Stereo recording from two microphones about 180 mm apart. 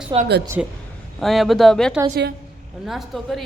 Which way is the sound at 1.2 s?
Centre (ahead or behind).